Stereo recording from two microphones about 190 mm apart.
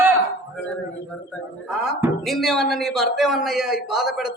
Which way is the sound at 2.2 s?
Centre (ahead or behind).